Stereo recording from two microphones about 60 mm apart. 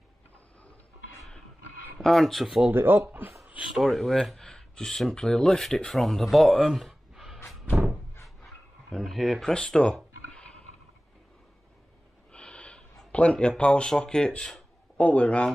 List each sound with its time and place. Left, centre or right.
2.0 s speech: centre
2.7 s speech: right
3.7 s speech: centre
7.7 s door: centre
8.9 s speech: centre
9.5 s speech: centre
10.3 s a sound: centre
12.3 s gasp: centre
15.0 s a man's voice: left